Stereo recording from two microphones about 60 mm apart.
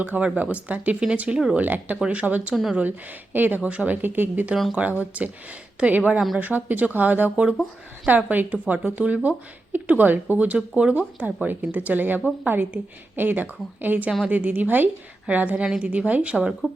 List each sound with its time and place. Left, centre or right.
0.0 s speech: right